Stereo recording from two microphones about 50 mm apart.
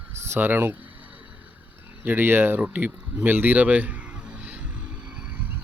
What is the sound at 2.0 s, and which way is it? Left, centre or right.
Speech, right.